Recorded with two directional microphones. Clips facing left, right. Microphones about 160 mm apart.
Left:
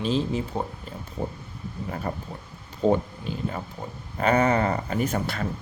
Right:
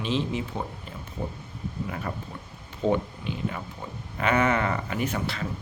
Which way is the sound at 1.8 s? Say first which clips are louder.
Left 4 dB; 35° left (ahead or behind).